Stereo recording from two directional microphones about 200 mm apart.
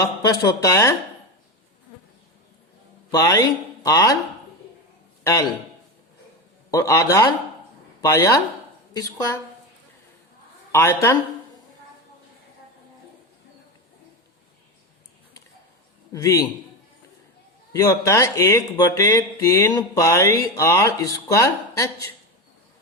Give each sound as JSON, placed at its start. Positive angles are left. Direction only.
{"t": 0.0, "sound": "speech", "side_deg": 15}
{"t": 3.1, "sound": "speech", "side_deg": 15}
{"t": 6.7, "sound": "speech", "side_deg": 15}
{"t": 10.7, "sound": "speech", "side_deg": 15}
{"t": 16.1, "sound": "speech", "side_deg": 15}
{"t": 17.7, "sound": "speech", "side_deg": 15}